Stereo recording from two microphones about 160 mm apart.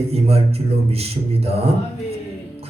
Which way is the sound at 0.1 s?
40° right (ahead or behind).